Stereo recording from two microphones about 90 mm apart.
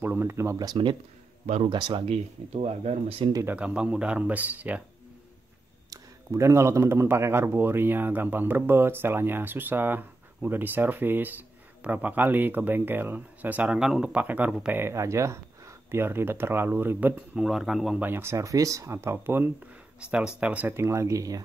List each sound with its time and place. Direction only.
0.0 s speech: 25° right (ahead or behind)
1.6 s speech: 60° right (ahead or behind)
2.6 s speech: 90° right
3.4 s speech: 15° right (ahead or behind)
5.9 s speech: 35° right (ahead or behind)
17.4 s speech: centre (ahead or behind)
18.0 s speech: 25° right (ahead or behind)
20.0 s speech: 10° right (ahead or behind); by 21.4 s 35° right (ahead or behind)